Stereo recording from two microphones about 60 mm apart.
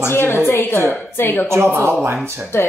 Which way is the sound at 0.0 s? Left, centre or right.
Left.